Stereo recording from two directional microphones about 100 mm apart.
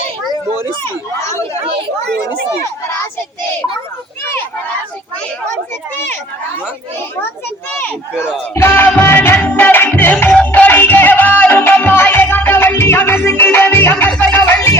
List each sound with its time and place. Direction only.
0.9 s speech: 30° left (ahead or behind)
8.5 s speech: 25° left (ahead or behind)
9.5 s music: 20° left (ahead or behind)
14.2 s a sound: 20° left (ahead or behind)